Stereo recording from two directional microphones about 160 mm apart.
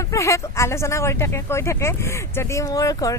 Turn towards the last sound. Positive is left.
turn(degrees=20)  # may be behind; listen again after turning